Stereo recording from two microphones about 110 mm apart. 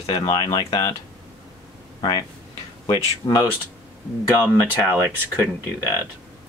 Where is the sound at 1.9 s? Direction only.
40° left (ahead or behind).